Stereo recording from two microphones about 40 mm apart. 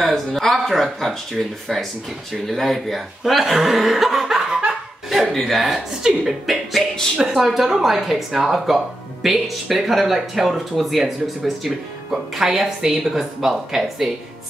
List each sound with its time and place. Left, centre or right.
0.0 s speech: centre
3.5 s chuckle: centre
4.5 s laughter: right
5.4 s speech: centre
6.0 s chuckle: centre
6.4 s music: centre
7.3 s speech: centre